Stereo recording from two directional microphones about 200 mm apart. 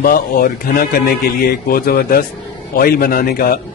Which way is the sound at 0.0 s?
45° left (ahead or behind).